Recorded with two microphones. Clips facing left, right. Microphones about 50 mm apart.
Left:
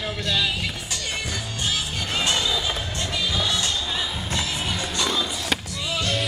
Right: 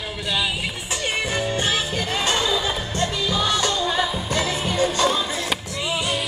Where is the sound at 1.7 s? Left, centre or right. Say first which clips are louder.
Right 4 dB; right.